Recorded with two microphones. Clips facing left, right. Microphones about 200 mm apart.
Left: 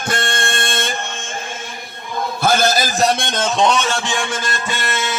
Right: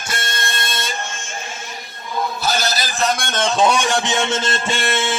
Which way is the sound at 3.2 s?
20° left (ahead or behind).